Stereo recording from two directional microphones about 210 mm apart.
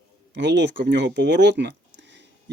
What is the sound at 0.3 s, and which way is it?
Speech, 55° right (ahead or behind).